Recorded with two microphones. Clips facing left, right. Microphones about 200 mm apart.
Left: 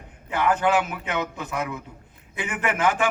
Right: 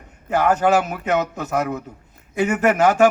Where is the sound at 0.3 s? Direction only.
45° right (ahead or behind).